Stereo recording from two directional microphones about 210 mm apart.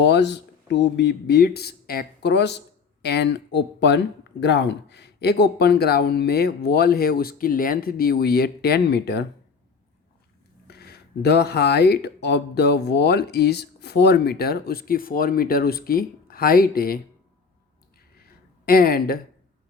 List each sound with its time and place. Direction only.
0.0 s speech: 55° left (ahead or behind)
10.7 s speech: 50° left (ahead or behind)
18.3 s a sound: 45° left (ahead or behind)